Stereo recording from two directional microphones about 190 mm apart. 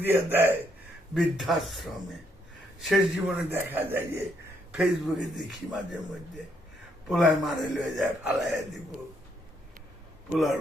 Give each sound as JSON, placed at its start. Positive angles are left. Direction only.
{"t": 0.0, "sound": "a man's voice", "side_deg": -10}
{"t": 1.1, "sound": "speech", "side_deg": 0}
{"t": 2.9, "sound": "a man's voice", "side_deg": -10}
{"t": 4.7, "sound": "speech", "side_deg": 0}
{"t": 7.1, "sound": "speech", "side_deg": 0}